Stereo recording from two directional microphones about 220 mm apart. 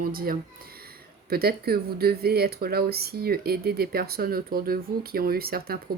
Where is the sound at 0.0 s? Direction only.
40° right (ahead or behind).